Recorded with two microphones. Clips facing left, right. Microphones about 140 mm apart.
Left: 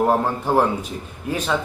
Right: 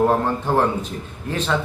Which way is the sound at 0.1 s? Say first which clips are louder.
Even; 10° left (ahead or behind).